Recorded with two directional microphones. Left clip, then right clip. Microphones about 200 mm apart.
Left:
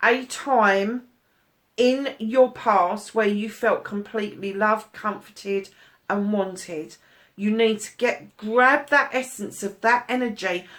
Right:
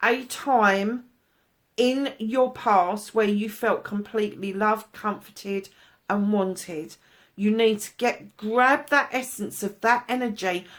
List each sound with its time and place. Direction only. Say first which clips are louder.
0.0 s speech: left 3 dB; 45° right (ahead or behind)